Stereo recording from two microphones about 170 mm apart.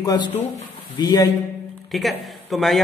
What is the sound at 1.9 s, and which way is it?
Speech, centre (ahead or behind).